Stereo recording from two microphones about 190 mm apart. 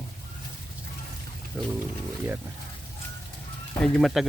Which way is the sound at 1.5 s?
10° right (ahead or behind).